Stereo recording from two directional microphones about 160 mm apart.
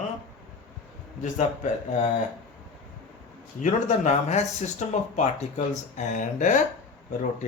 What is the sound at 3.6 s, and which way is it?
Speech, 45° left (ahead or behind).